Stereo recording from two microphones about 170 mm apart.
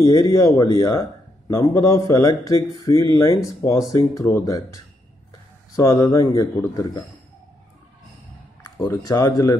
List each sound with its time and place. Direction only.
0.0 s a man's voice: 20° left (ahead or behind)
8.7 s speech: 15° left (ahead or behind)